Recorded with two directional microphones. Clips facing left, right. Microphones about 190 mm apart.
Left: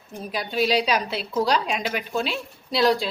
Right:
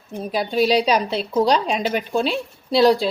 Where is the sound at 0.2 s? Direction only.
30° right (ahead or behind).